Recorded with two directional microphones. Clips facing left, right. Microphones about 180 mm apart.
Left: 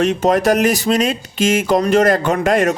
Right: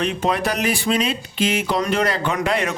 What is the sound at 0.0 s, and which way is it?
Speech, 45° left (ahead or behind).